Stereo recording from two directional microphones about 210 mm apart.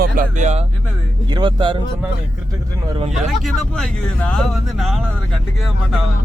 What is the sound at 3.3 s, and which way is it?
Speech, centre (ahead or behind).